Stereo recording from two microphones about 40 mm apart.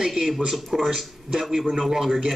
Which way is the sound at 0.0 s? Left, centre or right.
Centre.